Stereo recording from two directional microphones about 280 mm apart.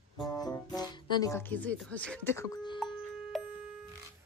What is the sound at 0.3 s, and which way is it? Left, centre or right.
Speech, centre.